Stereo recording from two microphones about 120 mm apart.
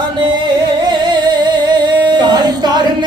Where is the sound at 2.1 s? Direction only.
35° right (ahead or behind).